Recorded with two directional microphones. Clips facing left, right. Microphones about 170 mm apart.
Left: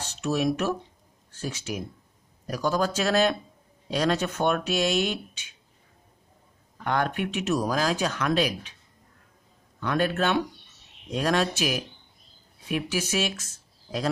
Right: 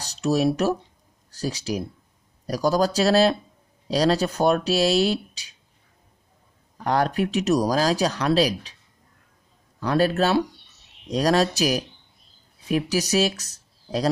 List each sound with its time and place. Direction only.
0.0 s speech: 35° right (ahead or behind)
6.8 s speech: 35° right (ahead or behind)
9.8 s speech: 35° right (ahead or behind)